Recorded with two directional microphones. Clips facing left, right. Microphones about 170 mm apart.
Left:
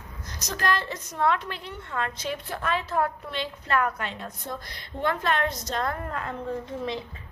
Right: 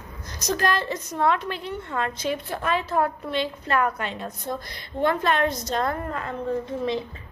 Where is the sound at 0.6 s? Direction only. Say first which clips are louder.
Even; 10° right (ahead or behind).